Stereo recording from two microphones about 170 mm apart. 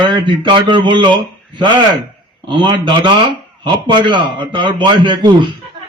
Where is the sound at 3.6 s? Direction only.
25° right (ahead or behind).